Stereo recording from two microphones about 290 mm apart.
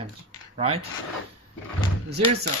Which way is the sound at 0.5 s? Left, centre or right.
Right.